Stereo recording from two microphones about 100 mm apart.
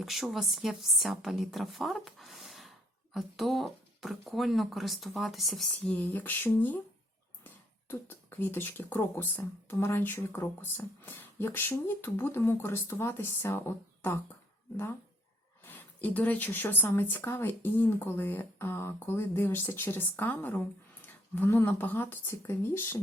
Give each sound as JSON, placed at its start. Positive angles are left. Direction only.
{"t": 0.0, "sound": "speech", "side_deg": 0}
{"t": 15.6, "sound": "speech", "side_deg": 15}